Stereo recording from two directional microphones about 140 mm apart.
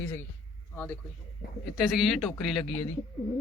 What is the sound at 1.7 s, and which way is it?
Speech, centre (ahead or behind).